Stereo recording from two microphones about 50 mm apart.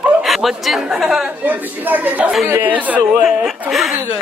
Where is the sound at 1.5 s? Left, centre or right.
Right.